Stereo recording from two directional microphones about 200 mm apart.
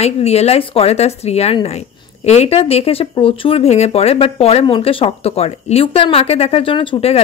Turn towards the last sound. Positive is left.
turn(degrees=30)  # may be behind; listen again after turning